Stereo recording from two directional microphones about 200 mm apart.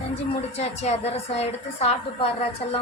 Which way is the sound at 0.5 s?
35° left (ahead or behind).